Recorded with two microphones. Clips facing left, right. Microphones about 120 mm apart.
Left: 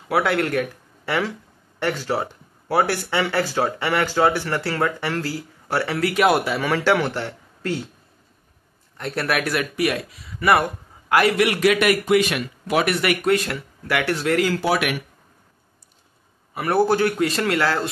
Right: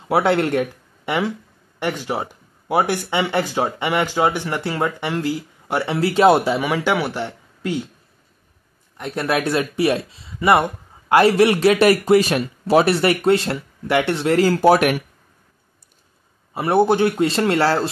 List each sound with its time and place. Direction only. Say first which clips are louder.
0.1 s speech: right 3 dB; 25° right (ahead or behind)
6.6 s speech: even; 15° right (ahead or behind)
8.9 s speech: right 2 dB; 15° right (ahead or behind); by 15.0 s 40° right (ahead or behind)
16.5 s speech: right 3 dB; 25° right (ahead or behind)